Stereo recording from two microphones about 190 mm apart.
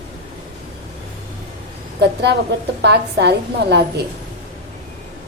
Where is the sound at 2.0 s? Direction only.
60° right (ahead or behind).